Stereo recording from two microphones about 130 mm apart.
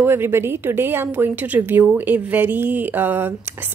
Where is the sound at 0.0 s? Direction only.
20° right (ahead or behind).